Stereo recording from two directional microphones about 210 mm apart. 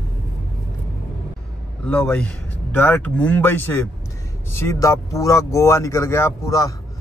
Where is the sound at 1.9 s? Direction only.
5° left (ahead or behind).